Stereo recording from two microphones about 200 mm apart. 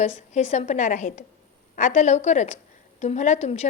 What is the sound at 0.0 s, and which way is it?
A woman's voice, 35° left (ahead or behind).